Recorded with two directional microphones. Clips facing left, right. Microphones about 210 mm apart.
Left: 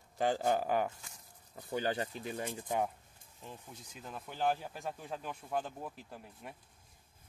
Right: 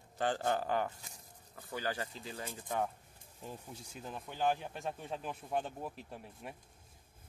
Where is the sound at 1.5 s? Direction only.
25° left (ahead or behind).